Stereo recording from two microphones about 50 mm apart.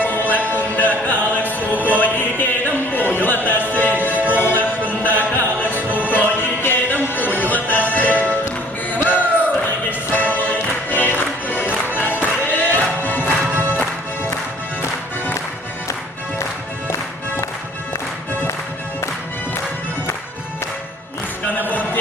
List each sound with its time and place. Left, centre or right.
0.0 s music: left
13.4 s music: right
21.5 s music: left